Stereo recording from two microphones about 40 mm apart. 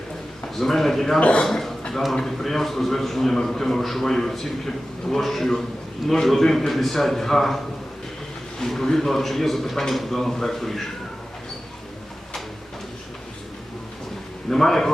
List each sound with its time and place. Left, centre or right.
0.5 s a man's voice: centre
1.2 s a man's voice: left
1.5 s a man's voice: centre
14.5 s a man's voice: centre